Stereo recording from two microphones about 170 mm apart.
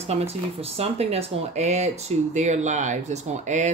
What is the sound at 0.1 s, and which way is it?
Speech, 35° right (ahead or behind).